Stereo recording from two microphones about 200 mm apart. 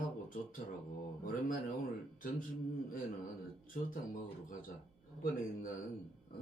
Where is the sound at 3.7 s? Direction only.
40° left (ahead or behind).